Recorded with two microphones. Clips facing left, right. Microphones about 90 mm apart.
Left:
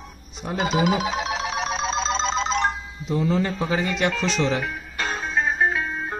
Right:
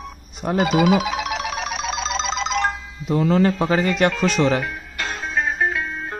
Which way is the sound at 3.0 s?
65° right (ahead or behind).